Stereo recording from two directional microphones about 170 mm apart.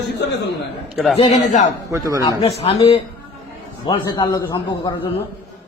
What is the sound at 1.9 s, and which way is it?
Speech, 15° right (ahead or behind).